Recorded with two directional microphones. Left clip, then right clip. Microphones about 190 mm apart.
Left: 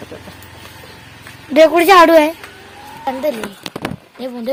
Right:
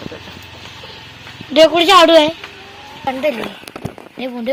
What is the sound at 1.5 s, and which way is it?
Speech, 30° left (ahead or behind).